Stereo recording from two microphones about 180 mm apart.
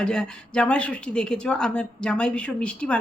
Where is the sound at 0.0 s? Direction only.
5° left (ahead or behind).